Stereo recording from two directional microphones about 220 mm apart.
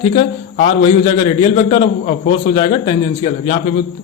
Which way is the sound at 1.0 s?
20° left (ahead or behind).